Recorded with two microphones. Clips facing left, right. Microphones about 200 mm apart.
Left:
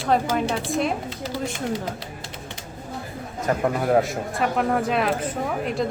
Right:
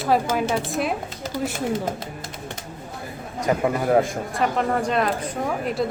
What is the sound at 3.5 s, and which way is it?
Speech, 10° right (ahead or behind).